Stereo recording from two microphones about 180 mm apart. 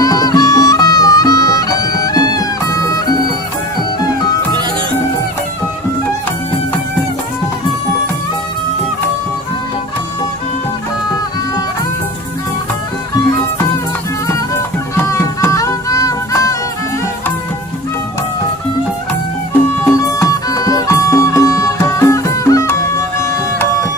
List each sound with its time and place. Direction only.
0.0 s music: 20° left (ahead or behind)
15.0 s music: 15° left (ahead or behind)
19.8 s music: 15° left (ahead or behind)